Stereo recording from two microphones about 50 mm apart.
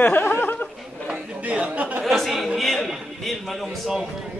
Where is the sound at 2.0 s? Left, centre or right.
Centre.